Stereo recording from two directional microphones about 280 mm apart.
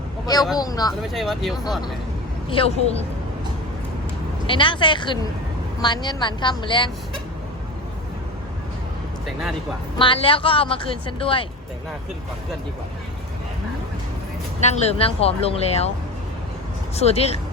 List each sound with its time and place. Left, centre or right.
0.5 s a woman's voice: centre
1.1 s speech: centre
2.5 s speech: left
4.4 s a woman's voice: centre
10.0 s speech: centre
14.6 s speech: left
16.9 s speech: left